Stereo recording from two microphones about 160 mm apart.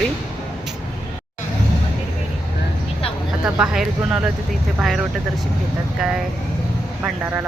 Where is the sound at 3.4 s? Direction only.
5° right (ahead or behind).